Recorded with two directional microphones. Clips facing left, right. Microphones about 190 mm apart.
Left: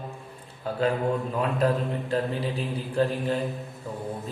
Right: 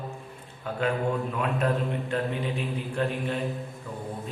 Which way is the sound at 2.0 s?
35° left (ahead or behind).